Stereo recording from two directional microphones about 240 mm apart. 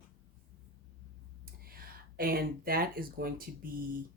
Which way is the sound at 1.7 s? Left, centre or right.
Right.